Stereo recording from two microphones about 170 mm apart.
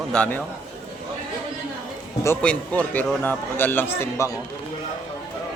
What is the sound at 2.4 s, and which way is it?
A man's voice, 5° left (ahead or behind).